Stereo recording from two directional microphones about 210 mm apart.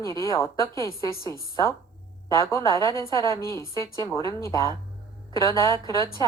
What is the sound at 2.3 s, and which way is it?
A woman's voice, 15° left (ahead or behind).